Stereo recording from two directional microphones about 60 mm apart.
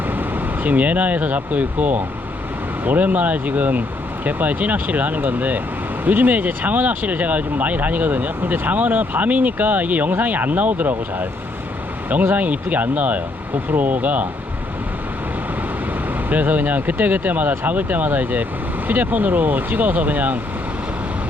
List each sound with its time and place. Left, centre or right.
0.1 s speech: right
16.3 s speech: right